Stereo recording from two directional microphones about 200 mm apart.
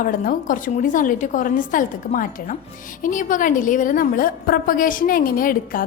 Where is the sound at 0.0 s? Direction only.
40° left (ahead or behind).